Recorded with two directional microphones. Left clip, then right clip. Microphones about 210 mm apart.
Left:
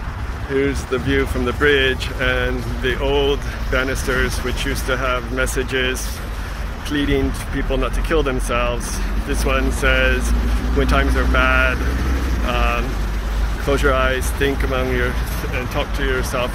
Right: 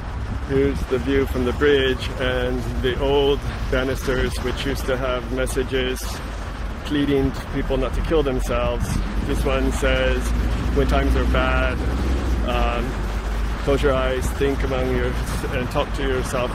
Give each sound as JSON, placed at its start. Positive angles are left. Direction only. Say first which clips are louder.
{"t": 1.1, "sound": "speech", "louder": "left 2 dB", "side_deg": -10}
{"t": 15.5, "sound": "speech", "louder": "even", "side_deg": -30}
{"t": 16.0, "sound": "speech", "louder": "left 2 dB", "side_deg": -15}